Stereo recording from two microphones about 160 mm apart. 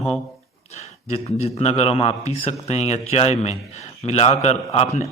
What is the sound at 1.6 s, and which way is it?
A man's voice, 40° left (ahead or behind).